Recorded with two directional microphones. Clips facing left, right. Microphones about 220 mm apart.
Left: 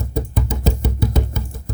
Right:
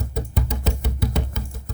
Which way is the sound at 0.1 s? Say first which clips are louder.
Left 6 dB; 50° left (ahead or behind).